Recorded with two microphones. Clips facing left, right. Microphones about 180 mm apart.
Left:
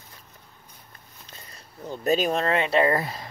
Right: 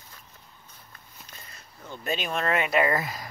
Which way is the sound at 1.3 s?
35° left (ahead or behind).